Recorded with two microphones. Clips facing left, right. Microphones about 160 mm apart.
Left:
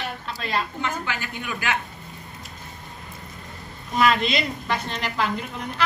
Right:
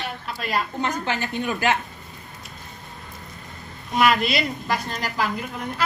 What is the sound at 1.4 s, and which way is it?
Speech, 30° right (ahead or behind).